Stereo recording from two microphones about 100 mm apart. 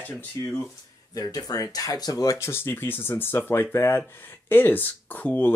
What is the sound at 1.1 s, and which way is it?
Speech, 40° left (ahead or behind).